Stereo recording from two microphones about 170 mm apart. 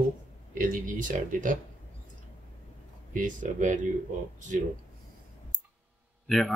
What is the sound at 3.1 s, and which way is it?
Speech, 50° right (ahead or behind).